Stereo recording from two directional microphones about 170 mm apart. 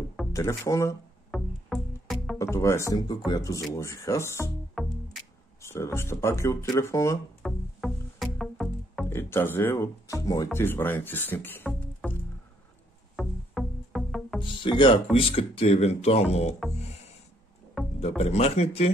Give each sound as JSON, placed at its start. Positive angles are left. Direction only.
{"t": 0.3, "sound": "speech", "side_deg": 15}
{"t": 1.3, "sound": "music", "side_deg": 0}
{"t": 2.3, "sound": "speech", "side_deg": 15}
{"t": 4.8, "sound": "music", "side_deg": 0}
{"t": 5.6, "sound": "speech", "side_deg": 15}
{"t": 7.4, "sound": "music", "side_deg": 0}
{"t": 9.1, "sound": "speech", "side_deg": 15}
{"t": 13.1, "sound": "music", "side_deg": 0}
{"t": 14.4, "sound": "speech", "side_deg": 30}
{"t": 16.7, "sound": "music", "side_deg": 40}
{"t": 18.0, "sound": "speech", "side_deg": 40}